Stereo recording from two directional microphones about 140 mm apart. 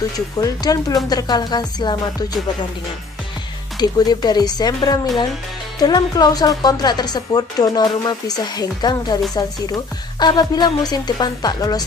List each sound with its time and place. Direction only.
0.4 s speech: 25° left (ahead or behind)
3.7 s speech: 30° left (ahead or behind)